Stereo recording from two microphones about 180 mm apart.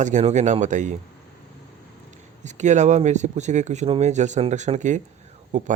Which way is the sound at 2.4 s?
40° right (ahead or behind).